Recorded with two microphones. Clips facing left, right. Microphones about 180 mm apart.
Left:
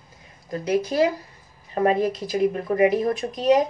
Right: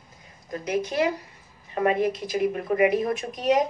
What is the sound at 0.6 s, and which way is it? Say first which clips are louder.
A woman's voice: left 4 dB; 35° left (ahead or behind).